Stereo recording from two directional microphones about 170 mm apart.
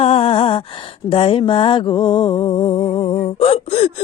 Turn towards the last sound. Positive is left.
turn(degrees=35)  # may be behind; listen again after turning